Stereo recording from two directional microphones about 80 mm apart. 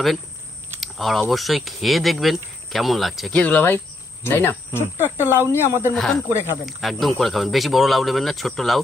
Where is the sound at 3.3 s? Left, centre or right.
Centre.